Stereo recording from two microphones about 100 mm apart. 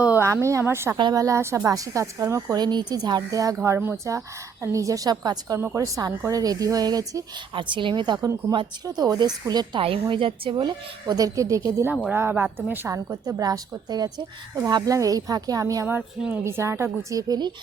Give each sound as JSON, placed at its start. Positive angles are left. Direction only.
{"t": 0.2, "sound": "a woman's voice", "side_deg": -25}
{"t": 2.6, "sound": "a woman's voice", "side_deg": -45}
{"t": 5.5, "sound": "a woman's voice", "side_deg": -30}
{"t": 7.5, "sound": "a woman's voice", "side_deg": -55}
{"t": 9.8, "sound": "a woman's voice", "side_deg": -65}
{"t": 10.6, "sound": "a woman's voice", "side_deg": -40}
{"t": 12.1, "sound": "a woman's voice", "side_deg": -20}
{"t": 12.9, "sound": "a woman's voice", "side_deg": -35}